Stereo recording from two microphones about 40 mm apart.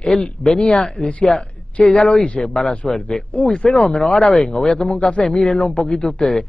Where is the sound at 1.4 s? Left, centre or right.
Left.